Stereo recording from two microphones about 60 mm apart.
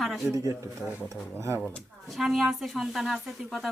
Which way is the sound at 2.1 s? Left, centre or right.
Centre.